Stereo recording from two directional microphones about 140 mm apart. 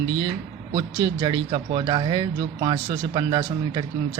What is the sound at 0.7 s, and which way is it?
Speech, 30° right (ahead or behind).